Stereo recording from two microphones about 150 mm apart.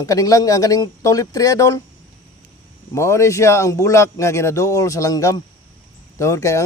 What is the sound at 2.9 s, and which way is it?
A man's voice, 20° left (ahead or behind).